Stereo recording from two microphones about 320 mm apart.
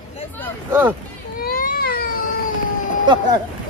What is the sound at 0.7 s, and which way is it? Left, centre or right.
Speech, centre.